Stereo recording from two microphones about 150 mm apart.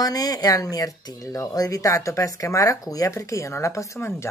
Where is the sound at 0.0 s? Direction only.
25° left (ahead or behind).